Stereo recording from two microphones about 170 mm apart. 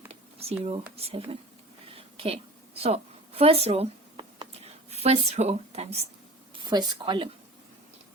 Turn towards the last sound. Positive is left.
turn(degrees=-30)  # may be behind; listen again after turning